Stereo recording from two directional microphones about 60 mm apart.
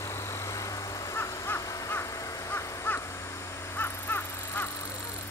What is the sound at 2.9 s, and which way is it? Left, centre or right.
Crow, left.